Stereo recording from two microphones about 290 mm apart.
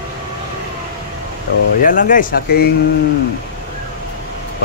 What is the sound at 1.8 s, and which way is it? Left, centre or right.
Speech, left.